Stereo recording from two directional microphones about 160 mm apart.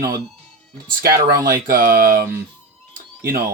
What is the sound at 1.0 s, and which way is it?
Speech, 65° right (ahead or behind).